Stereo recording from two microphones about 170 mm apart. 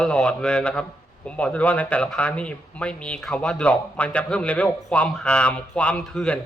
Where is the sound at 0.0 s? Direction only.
5° left (ahead or behind).